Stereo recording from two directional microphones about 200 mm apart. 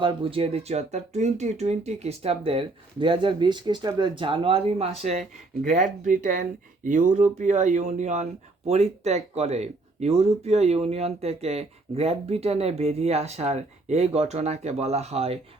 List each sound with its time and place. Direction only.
0.0 s speech: 25° right (ahead or behind)